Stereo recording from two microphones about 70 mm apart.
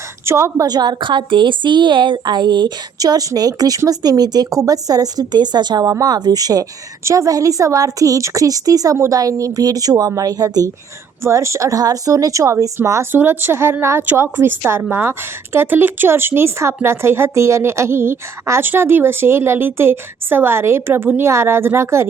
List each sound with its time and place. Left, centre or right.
0.3 s speech: right
0.6 s a woman's voice: right
4.6 s a woman's voice: right
5.8 s a woman's voice: right
6.1 s a woman's voice: right
7.0 s a woman's voice: right
11.2 s speech: right
13.1 s a woman's voice: right